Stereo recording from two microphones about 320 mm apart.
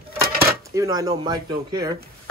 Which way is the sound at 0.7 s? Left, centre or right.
Centre.